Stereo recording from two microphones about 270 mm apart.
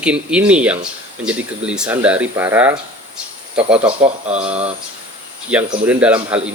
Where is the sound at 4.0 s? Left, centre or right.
Right.